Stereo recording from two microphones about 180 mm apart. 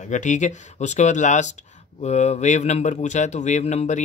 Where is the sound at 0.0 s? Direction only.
40° left (ahead or behind).